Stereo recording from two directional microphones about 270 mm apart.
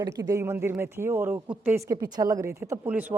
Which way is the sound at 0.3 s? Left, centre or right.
Centre.